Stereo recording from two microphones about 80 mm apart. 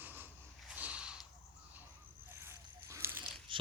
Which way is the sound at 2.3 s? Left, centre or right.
Right.